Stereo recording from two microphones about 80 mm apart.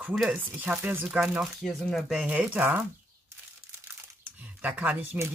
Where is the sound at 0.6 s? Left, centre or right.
Right.